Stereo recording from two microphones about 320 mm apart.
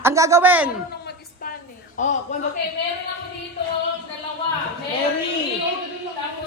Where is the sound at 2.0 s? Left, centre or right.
Left.